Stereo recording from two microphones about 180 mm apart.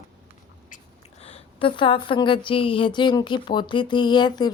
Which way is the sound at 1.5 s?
30° left (ahead or behind).